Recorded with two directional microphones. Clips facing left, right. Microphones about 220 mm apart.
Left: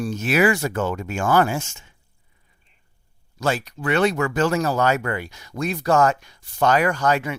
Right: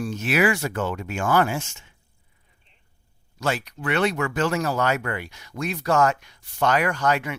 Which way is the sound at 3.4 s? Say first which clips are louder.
Left 3 dB; 35° left (ahead or behind).